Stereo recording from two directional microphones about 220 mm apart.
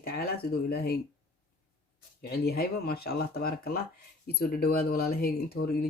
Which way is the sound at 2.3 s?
45° left (ahead or behind).